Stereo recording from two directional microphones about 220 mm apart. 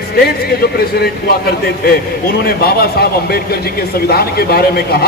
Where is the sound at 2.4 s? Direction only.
45° left (ahead or behind).